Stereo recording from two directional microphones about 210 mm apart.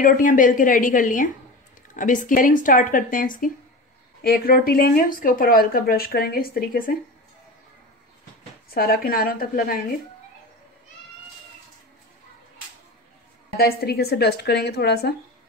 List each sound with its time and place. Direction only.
0.0 s speech: 40° left (ahead or behind)
8.6 s speech: 45° left (ahead or behind)
13.6 s speech: 45° left (ahead or behind)